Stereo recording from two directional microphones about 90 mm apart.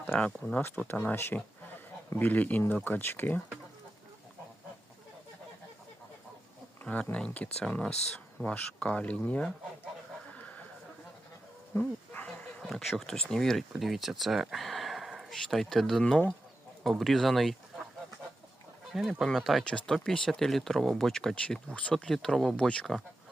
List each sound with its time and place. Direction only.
0.1 s speech: 5° left (ahead or behind)
0.9 s speech: 20° left (ahead or behind)
6.8 s speech: 15° left (ahead or behind)
10.3 s a sound: 15° left (ahead or behind)
11.7 s dog: 15° left (ahead or behind)
12.6 s speech: centre (ahead or behind)
18.9 s speech: 5° left (ahead or behind)